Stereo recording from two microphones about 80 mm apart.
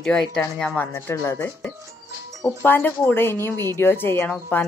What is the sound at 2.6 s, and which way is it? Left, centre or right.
Speech, left.